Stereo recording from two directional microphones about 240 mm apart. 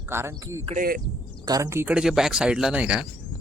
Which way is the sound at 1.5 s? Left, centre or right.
Centre.